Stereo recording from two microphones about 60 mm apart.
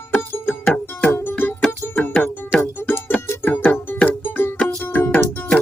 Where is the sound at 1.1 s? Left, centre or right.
Left.